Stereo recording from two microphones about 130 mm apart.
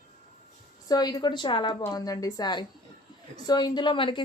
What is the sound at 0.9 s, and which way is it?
A woman's voice, 30° left (ahead or behind).